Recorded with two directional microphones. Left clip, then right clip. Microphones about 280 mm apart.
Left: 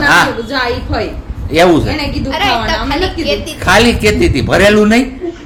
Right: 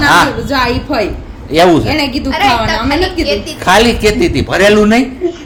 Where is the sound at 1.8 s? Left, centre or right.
Right.